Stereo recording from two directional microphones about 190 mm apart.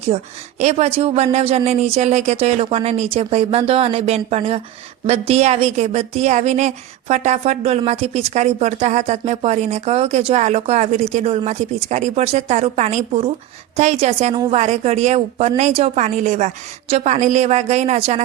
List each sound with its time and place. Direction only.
0.6 s a woman's voice: 35° right (ahead or behind)